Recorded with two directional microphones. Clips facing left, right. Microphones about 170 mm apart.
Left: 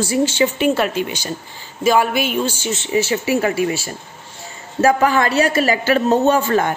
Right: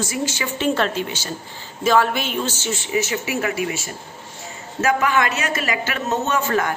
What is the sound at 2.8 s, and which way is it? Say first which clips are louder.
A woman's voice: left 5 dB; 30° left (ahead or behind).